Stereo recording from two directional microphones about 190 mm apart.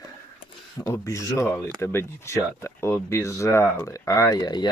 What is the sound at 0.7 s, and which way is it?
Speech, 15° left (ahead or behind).